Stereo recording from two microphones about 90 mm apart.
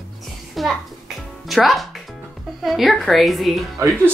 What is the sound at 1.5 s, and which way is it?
Speech, centre (ahead or behind).